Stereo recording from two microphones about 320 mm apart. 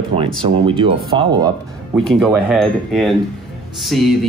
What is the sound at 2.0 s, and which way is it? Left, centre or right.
Speech, centre.